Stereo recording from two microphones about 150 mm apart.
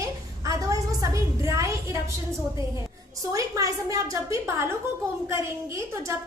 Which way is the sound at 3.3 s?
20° right (ahead or behind).